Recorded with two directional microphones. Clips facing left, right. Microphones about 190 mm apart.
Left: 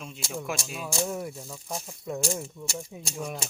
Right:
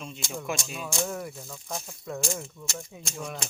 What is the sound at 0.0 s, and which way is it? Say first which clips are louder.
Speech: even; 5° left (ahead or behind).